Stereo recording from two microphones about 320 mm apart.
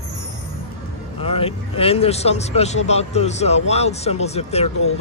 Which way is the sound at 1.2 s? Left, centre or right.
Centre.